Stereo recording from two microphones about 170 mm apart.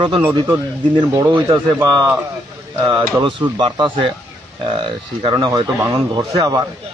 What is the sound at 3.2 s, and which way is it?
A man's voice, 30° right (ahead or behind).